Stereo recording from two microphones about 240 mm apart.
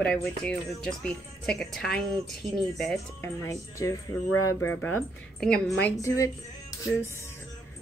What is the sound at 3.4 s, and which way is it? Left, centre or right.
A woman's voice, centre.